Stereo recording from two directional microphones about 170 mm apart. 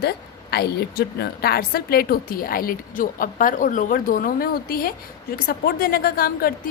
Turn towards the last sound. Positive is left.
turn(degrees=60)  # may be behind; listen again after turning